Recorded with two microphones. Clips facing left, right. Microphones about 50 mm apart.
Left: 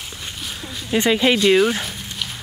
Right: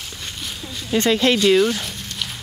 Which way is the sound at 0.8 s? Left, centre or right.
Centre.